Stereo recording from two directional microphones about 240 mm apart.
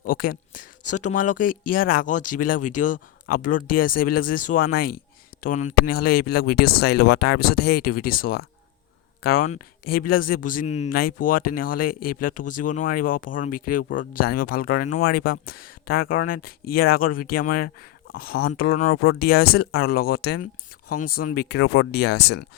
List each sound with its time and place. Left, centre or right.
0.0 s speech: left